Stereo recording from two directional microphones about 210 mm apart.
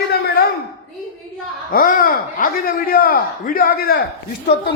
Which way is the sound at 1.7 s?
45° left (ahead or behind).